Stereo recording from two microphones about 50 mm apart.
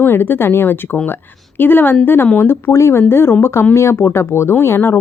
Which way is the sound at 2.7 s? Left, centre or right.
Left.